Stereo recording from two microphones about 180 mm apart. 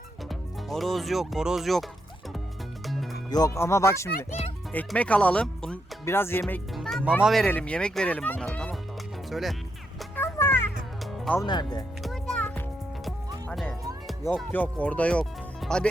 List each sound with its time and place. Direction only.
0.3 s speech: centre (ahead or behind)
2.8 s music: centre (ahead or behind)
3.2 s speech: 20° left (ahead or behind); by 9.6 s centre (ahead or behind)
10.2 s music: 15° left (ahead or behind)
11.3 s speech: 25° left (ahead or behind)
12.0 s music: 5° left (ahead or behind)
14.5 s speech: 10° left (ahead or behind)